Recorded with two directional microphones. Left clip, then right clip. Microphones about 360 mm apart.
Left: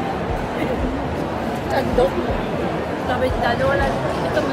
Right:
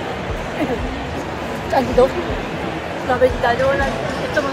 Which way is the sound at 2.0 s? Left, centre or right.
Centre.